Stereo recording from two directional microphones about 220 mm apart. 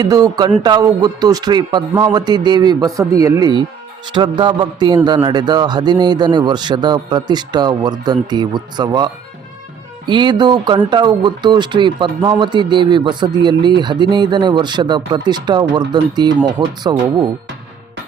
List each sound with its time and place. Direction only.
0.0 s a man's voice: 15° right (ahead or behind)
10.1 s a man's voice: 20° right (ahead or behind)